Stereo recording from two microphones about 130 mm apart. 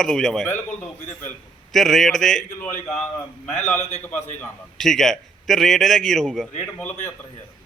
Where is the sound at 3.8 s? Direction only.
65° left (ahead or behind).